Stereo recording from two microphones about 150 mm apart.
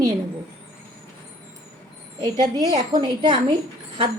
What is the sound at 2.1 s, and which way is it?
A woman's voice, 30° right (ahead or behind).